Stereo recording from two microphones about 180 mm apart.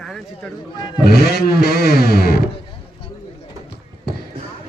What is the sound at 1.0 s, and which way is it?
A man's voice, 60° left (ahead or behind).